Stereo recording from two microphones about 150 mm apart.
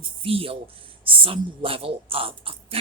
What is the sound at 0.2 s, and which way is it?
A woman's voice, 40° right (ahead or behind).